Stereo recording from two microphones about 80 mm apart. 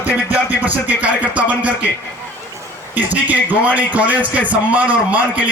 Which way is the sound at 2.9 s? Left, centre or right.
Right.